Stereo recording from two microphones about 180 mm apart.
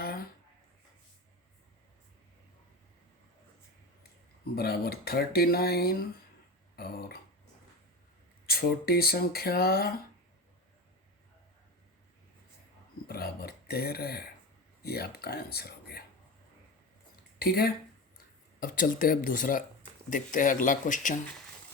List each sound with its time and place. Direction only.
0.0 s a sound: 60° left (ahead or behind)
4.5 s speech: 60° left (ahead or behind)
6.7 s a sound: 60° left (ahead or behind)
8.4 s speech: 55° left (ahead or behind)
13.1 s speech: 60° left (ahead or behind)
17.4 s speech: 55° left (ahead or behind)